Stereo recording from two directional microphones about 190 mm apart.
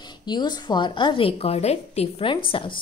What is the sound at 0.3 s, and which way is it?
A woman's voice, 20° left (ahead or behind).